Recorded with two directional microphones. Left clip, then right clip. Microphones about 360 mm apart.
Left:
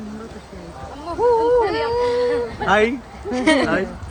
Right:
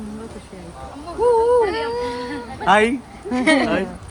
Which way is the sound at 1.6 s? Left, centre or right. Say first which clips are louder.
Left 3 dB; centre.